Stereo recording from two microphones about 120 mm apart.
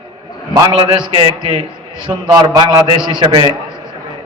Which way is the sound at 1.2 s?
40° right (ahead or behind).